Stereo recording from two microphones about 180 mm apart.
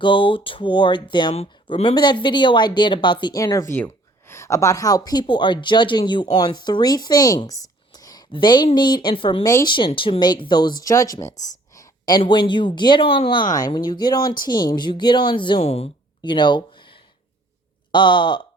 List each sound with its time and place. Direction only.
0.0 s speech: 30° left (ahead or behind)
9.5 s speech: 15° left (ahead or behind)
9.7 s speech: 30° left (ahead or behind)
11.3 s speech: 40° left (ahead or behind)
11.7 s speech: 20° left (ahead or behind)